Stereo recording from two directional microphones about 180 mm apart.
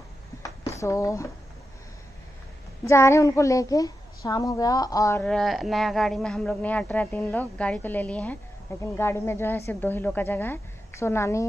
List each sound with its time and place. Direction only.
0.4 s a sound: 15° left (ahead or behind)
2.8 s a woman's voice: 15° left (ahead or behind)
5.2 s a woman's voice: centre (ahead or behind)